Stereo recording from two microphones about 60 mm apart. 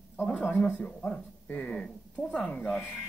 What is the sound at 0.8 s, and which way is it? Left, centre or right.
Speech, centre.